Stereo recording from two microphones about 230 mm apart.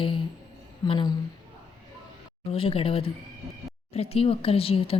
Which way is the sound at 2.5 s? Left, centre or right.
Left.